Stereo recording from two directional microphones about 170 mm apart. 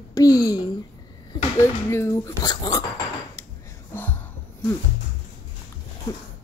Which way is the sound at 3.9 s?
10° left (ahead or behind).